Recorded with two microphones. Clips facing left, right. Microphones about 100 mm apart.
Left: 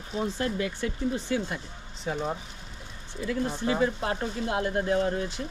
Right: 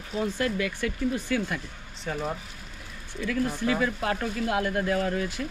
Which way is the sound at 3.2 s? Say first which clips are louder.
Right 1 dB; 25° left (ahead or behind).